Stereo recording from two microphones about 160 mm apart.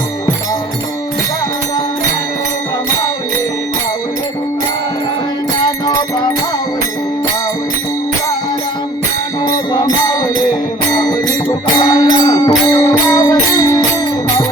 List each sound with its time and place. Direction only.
11.0 s music: 25° left (ahead or behind)